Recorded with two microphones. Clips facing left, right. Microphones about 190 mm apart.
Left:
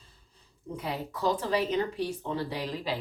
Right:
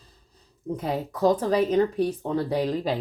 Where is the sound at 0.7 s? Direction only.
45° right (ahead or behind).